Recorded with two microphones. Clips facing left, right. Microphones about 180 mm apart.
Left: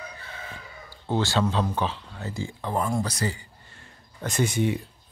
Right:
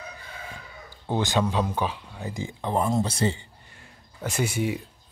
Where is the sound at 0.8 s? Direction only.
15° right (ahead or behind).